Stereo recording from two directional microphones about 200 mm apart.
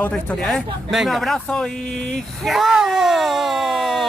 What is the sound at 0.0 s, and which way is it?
Speech, 5° left (ahead or behind).